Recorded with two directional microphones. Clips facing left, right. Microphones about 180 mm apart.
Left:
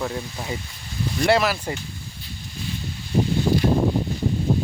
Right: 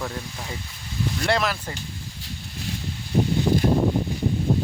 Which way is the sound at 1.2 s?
5° left (ahead or behind).